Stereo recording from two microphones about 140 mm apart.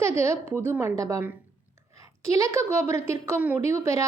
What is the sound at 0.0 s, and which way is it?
A woman's voice, 20° right (ahead or behind).